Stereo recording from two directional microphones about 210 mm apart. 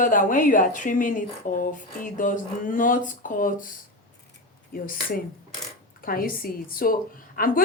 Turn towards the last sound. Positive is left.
turn(degrees=45)  # may be behind; listen again after turning